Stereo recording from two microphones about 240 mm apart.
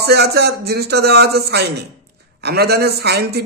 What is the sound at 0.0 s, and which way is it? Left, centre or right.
A man's voice, right.